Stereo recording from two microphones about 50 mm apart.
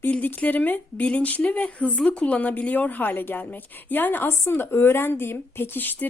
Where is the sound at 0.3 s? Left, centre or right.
Left.